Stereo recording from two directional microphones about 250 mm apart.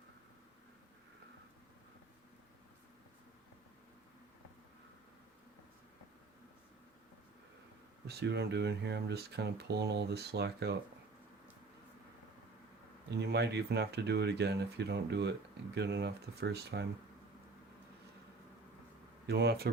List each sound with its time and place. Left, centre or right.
8.0 s speech: right
13.1 s speech: right
19.3 s speech: right